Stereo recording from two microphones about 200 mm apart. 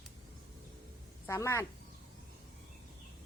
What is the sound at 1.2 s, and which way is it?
Speech, 15° left (ahead or behind).